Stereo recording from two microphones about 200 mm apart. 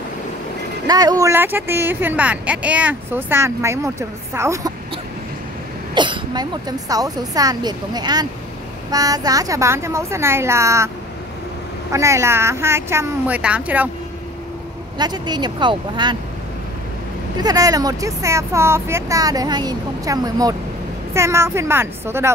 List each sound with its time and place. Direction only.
0.8 s speech: 20° right (ahead or behind)
5.9 s speech: 20° right (ahead or behind)
11.9 s speech: 15° right (ahead or behind)
15.0 s speech: 20° right (ahead or behind)
17.4 s speech: 20° right (ahead or behind)